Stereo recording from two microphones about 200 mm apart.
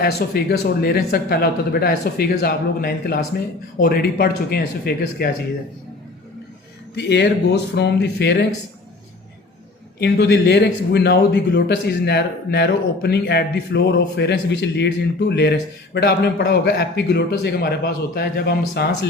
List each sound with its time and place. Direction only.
0.0 s speech: 50° left (ahead or behind)
6.9 s speech: 60° left (ahead or behind)
10.0 s speech: 55° left (ahead or behind)